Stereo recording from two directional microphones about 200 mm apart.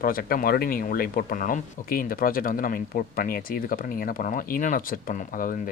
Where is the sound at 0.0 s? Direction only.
45° left (ahead or behind).